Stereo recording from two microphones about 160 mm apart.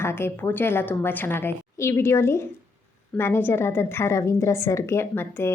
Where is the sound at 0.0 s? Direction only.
15° left (ahead or behind).